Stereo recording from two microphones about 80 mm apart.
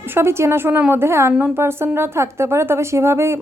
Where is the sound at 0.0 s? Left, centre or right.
Right.